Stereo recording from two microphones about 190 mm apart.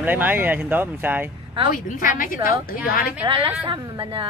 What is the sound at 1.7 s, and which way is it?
A woman's voice, 45° left (ahead or behind).